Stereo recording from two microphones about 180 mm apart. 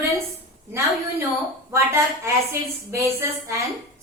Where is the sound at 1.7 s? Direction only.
15° right (ahead or behind).